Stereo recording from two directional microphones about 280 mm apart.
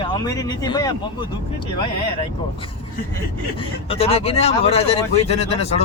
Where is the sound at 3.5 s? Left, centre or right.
Left.